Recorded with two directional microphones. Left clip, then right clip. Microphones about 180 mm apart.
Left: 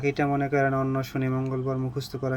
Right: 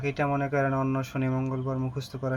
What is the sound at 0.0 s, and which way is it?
Speech, 20° left (ahead or behind).